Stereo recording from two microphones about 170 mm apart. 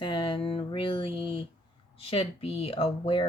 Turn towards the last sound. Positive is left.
turn(degrees=35)  # may be behind; listen again after turning